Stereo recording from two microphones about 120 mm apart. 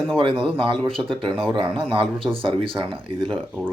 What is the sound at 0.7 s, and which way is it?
Speech, 5° left (ahead or behind).